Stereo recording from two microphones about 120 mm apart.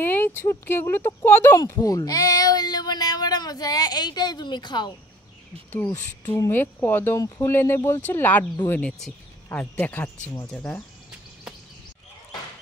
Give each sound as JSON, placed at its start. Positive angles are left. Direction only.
{"t": 0.0, "sound": "speech", "side_deg": 15}
{"t": 5.7, "sound": "speech", "side_deg": 20}